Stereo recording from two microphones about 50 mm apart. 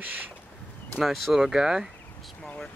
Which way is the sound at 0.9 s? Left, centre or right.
Centre.